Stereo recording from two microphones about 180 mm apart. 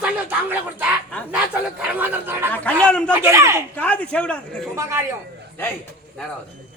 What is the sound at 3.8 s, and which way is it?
Speech, 5° left (ahead or behind).